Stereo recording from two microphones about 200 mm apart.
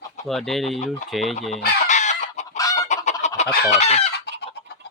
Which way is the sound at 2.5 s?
15° left (ahead or behind).